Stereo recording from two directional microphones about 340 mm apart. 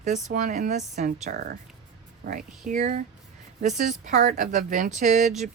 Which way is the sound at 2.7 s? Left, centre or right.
Right.